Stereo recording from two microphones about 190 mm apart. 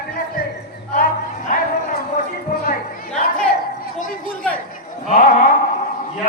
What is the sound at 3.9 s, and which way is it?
Chatter, 45° left (ahead or behind).